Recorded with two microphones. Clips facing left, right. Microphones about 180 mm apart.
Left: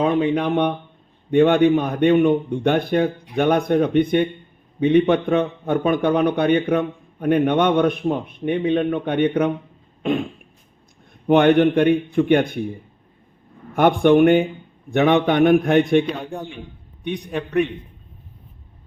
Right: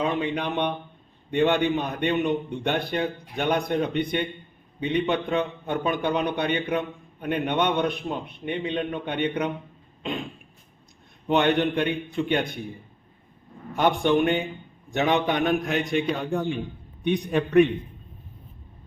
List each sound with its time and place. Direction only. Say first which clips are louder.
0.0 s a man's voice: left 7 dB; 50° left (ahead or behind)
10.0 s cough: left 9 dB; 55° left (ahead or behind)
11.3 s a man's voice: left 8 dB; 55° left (ahead or behind)
13.7 s a man's voice: left 7 dB; 55° left (ahead or behind)